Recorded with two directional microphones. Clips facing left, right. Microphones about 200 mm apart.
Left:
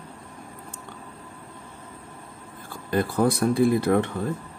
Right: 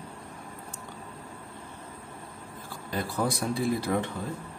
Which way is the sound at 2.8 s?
55° left (ahead or behind).